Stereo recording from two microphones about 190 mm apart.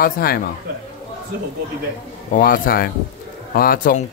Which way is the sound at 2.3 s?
45° left (ahead or behind).